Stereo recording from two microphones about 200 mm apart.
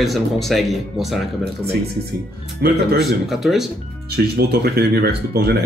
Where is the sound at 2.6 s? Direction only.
50° right (ahead or behind).